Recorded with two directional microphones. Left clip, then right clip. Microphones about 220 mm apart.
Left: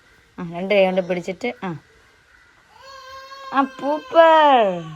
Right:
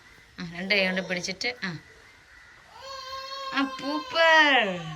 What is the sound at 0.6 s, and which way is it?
Speech, 25° right (ahead or behind).